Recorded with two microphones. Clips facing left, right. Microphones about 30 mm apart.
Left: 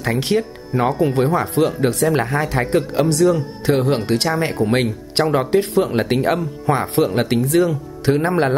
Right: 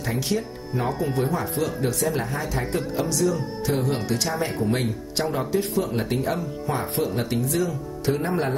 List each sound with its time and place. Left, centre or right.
0.0 s speech: left